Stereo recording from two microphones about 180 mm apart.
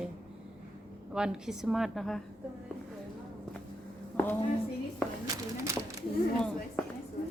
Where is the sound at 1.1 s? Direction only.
5° right (ahead or behind).